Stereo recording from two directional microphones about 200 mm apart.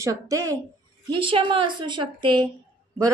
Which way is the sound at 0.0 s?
15° right (ahead or behind).